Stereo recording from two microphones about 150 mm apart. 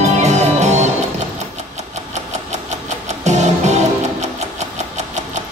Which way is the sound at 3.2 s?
50° right (ahead or behind).